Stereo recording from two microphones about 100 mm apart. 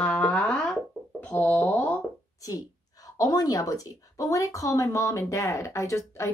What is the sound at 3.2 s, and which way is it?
Speech, 35° left (ahead or behind).